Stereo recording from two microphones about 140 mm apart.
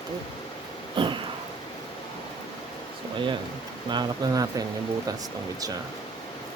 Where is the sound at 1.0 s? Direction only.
35° right (ahead or behind).